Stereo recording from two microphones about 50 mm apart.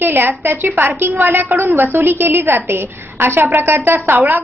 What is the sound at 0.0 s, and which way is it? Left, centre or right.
A woman's voice, right.